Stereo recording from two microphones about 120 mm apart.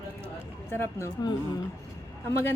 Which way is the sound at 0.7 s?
20° left (ahead or behind).